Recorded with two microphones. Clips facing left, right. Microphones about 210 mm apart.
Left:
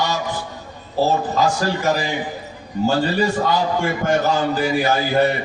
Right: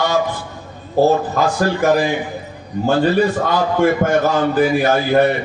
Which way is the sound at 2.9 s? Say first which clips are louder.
Right 5 dB; 55° right (ahead or behind).